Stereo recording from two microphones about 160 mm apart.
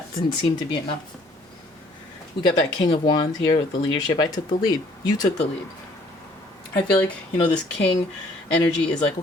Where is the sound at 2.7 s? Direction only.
25° left (ahead or behind).